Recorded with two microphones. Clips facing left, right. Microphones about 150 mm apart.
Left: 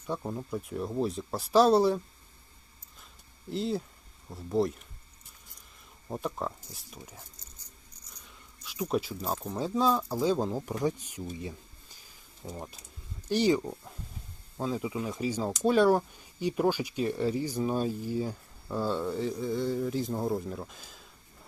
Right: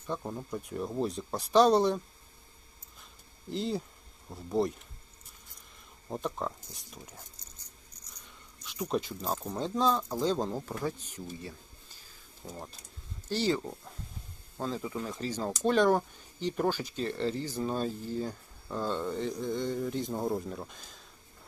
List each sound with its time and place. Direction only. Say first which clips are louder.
0.1 s speech: left 2 dB; 5° left (ahead or behind)
3.5 s speech: left 2 dB; centre (ahead or behind)
6.1 s speech: left 1 dB; 5° left (ahead or behind)
8.1 s a sound: left 1 dB; centre (ahead or behind)
9.4 s speech: left 2 dB; centre (ahead or behind)
11.3 s a sound: left 5 dB; 15° left (ahead or behind)
12.5 s speech: left 3 dB; 5° left (ahead or behind)
13.2 s speech: left 4 dB; 15° left (ahead or behind)